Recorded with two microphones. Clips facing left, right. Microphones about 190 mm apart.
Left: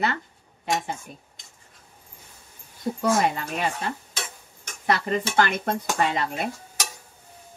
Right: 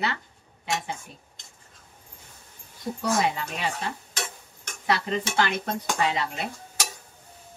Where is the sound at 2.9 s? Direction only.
50° left (ahead or behind).